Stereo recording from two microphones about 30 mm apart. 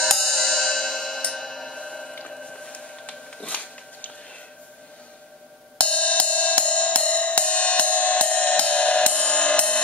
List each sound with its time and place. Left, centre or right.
0.0 s music: centre
1.7 s music: left
3.4 s a sound: left
5.8 s music: left